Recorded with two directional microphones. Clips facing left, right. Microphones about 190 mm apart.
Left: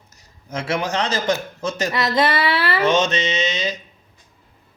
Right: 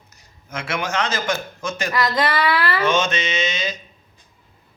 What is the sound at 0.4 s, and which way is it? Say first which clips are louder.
Mantra: left 3 dB; 35° left (ahead or behind).